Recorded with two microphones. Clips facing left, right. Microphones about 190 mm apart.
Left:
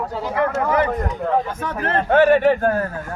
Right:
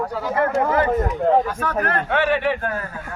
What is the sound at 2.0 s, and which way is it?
Speech, 45° left (ahead or behind).